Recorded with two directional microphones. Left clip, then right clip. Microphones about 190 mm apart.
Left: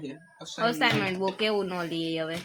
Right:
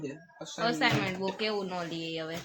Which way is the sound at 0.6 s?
50° left (ahead or behind).